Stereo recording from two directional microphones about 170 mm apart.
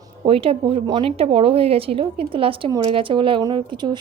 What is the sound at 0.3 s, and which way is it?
A woman's voice, 35° right (ahead or behind).